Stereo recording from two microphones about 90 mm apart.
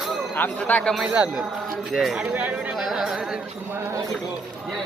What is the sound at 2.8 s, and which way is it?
Music, 5° right (ahead or behind).